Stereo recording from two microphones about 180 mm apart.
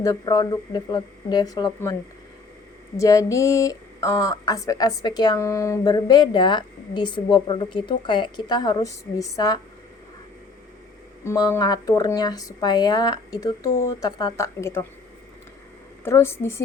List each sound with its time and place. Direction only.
0.0 s a woman's voice: 20° left (ahead or behind)
3.0 s a woman's voice: 20° left (ahead or behind)
11.2 s a woman's voice: 15° left (ahead or behind)
16.0 s a woman's voice: 15° left (ahead or behind)